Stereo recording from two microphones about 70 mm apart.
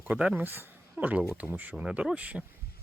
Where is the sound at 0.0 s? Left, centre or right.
Right.